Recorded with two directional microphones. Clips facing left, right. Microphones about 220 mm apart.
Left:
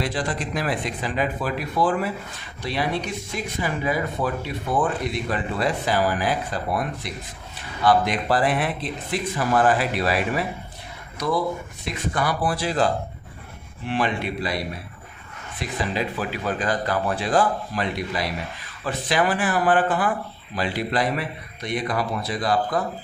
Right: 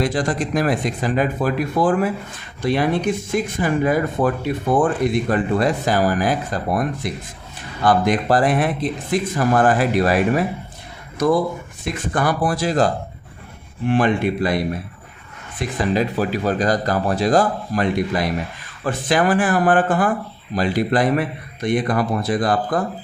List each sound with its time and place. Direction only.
0.0 s speech: 45° right (ahead or behind)
15.6 s a man's voice: 50° right (ahead or behind)